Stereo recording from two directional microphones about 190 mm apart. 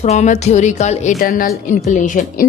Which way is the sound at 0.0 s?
35° left (ahead or behind).